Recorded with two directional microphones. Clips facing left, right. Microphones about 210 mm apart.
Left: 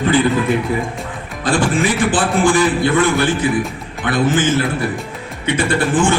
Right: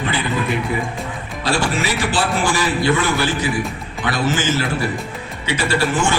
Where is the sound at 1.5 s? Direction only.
50° left (ahead or behind).